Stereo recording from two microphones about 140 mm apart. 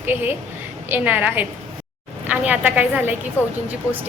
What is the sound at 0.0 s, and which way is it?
A woman's voice, 15° right (ahead or behind).